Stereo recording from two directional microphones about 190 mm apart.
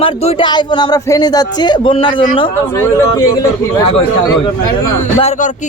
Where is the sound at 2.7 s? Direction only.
15° left (ahead or behind).